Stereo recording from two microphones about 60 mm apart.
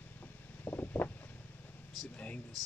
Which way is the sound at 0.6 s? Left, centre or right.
Left.